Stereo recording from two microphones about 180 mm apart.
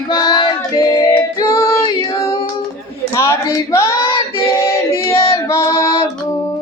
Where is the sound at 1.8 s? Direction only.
20° left (ahead or behind).